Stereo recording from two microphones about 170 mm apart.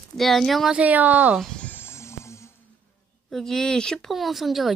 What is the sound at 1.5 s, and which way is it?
Music, 10° left (ahead or behind).